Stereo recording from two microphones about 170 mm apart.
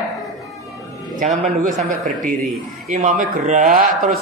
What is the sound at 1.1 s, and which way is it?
Speech, 45° right (ahead or behind).